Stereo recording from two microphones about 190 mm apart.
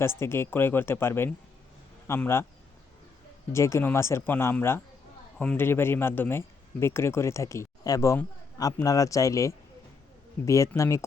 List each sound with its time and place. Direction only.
0.0 s speech: 15° left (ahead or behind)
3.5 s speech: 15° left (ahead or behind)